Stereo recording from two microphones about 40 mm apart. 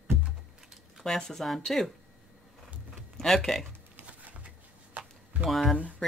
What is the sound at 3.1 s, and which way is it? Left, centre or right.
Speech, centre.